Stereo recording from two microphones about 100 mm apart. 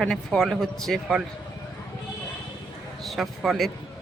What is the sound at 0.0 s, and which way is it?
Speech, 5° left (ahead or behind).